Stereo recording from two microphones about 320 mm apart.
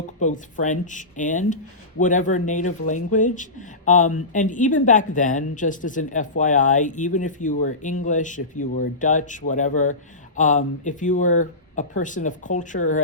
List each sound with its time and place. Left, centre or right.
0.2 s speech: left